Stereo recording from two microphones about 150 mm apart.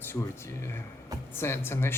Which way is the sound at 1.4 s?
15° left (ahead or behind).